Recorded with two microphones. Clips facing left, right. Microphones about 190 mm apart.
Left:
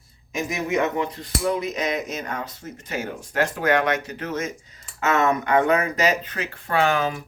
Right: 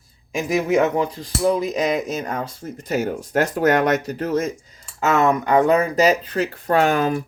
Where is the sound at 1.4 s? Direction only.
35° right (ahead or behind).